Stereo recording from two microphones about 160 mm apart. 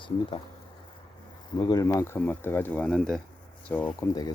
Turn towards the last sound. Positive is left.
turn(degrees=10)  # may be behind; listen again after turning